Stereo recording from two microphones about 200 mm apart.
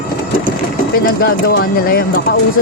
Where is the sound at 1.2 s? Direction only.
50° left (ahead or behind).